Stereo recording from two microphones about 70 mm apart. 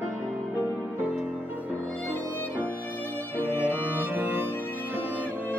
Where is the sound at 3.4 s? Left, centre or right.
Right.